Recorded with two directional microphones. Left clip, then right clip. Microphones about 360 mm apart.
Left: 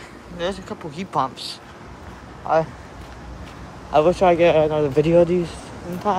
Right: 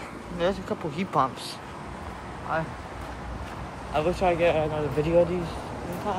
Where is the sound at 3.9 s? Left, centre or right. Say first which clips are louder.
Left 9 dB; centre.